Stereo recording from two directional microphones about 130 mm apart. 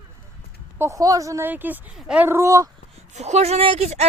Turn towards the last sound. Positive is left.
turn(degrees=-55)  # may be behind; listen again after turning